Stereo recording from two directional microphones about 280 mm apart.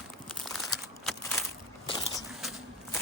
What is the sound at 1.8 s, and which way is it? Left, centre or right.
Crushing, centre.